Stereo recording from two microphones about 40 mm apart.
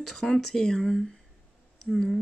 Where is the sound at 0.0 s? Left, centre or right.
Centre.